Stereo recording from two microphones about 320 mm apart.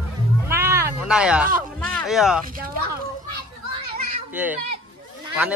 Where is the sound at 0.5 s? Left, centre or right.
Centre.